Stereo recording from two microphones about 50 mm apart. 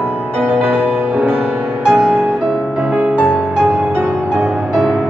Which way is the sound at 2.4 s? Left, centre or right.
Centre.